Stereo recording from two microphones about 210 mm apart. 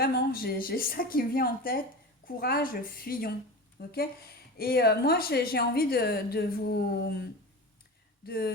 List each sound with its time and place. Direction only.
0.0 s a woman's voice: 45° left (ahead or behind)